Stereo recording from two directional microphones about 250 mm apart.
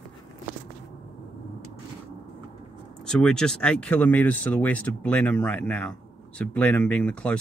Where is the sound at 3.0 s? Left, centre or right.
Centre.